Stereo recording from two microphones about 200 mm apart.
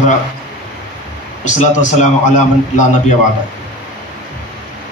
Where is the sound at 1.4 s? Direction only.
35° left (ahead or behind).